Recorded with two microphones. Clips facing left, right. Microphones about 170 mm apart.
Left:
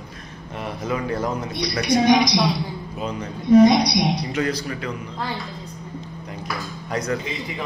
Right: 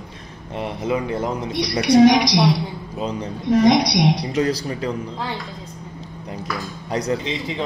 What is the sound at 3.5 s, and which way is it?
Speech, 90° right.